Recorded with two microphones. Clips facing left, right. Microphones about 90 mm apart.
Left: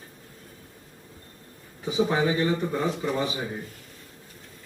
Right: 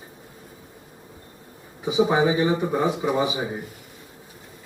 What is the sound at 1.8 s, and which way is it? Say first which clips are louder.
Speech: right 4 dB; 15° right (ahead or behind).